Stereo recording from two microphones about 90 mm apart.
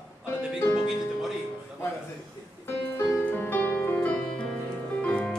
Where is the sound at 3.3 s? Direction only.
20° left (ahead or behind).